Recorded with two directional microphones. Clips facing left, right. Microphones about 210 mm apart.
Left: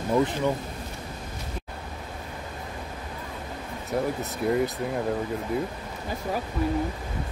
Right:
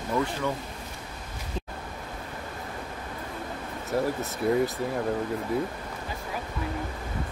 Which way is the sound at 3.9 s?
Centre (ahead or behind).